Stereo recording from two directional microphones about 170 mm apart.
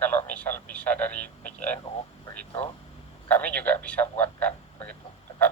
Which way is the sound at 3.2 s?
10° left (ahead or behind).